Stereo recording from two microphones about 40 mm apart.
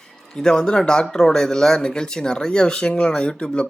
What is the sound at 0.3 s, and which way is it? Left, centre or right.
Speech, centre.